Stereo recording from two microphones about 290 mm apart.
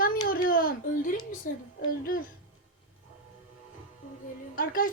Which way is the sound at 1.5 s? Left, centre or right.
Left.